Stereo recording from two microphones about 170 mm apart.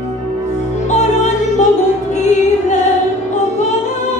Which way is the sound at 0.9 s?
45° left (ahead or behind).